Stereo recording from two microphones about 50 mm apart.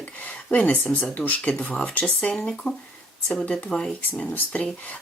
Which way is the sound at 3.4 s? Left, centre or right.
Left.